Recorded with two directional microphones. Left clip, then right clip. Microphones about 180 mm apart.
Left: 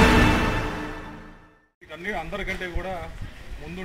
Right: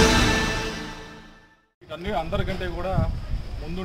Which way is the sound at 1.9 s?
20° right (ahead or behind).